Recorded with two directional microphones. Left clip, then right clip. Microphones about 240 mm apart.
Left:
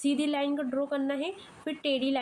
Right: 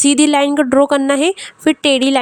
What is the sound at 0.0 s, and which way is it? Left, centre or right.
Speech, right.